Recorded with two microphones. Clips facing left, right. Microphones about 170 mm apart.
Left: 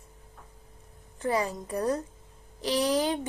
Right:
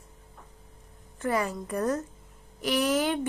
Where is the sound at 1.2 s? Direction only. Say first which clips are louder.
Even; 35° left (ahead or behind).